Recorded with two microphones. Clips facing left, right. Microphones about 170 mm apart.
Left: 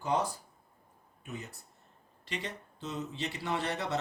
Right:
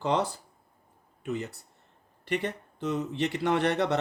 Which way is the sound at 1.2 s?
75° right (ahead or behind).